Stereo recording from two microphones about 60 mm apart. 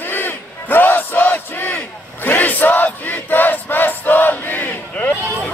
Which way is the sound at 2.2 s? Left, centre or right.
Left.